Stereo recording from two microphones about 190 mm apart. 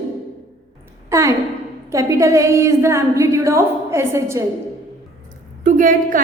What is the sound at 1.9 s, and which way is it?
A woman's voice, 15° right (ahead or behind).